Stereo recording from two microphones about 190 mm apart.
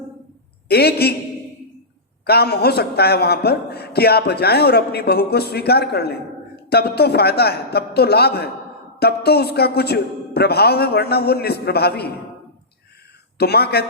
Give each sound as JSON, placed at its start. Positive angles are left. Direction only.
{"t": 0.7, "sound": "a man's voice", "side_deg": 55}
{"t": 2.2, "sound": "a man's voice", "side_deg": 55}
{"t": 13.4, "sound": "a man's voice", "side_deg": 55}